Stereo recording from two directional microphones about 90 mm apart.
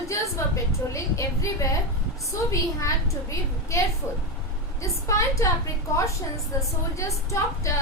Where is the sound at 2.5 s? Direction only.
35° left (ahead or behind).